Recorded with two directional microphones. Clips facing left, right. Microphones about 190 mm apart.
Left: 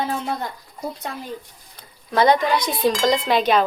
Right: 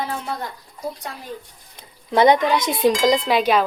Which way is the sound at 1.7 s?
20° right (ahead or behind).